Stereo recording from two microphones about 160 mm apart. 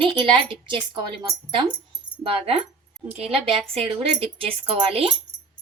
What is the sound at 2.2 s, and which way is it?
A woman's voice, 35° right (ahead or behind).